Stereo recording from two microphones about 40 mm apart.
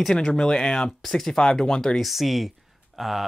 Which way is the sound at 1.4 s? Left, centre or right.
Left.